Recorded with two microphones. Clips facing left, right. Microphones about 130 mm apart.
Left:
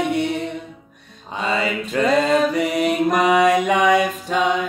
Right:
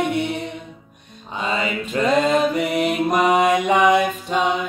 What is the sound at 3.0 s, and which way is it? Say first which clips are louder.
Mantra: left 1 dB; 40° left (ahead or behind).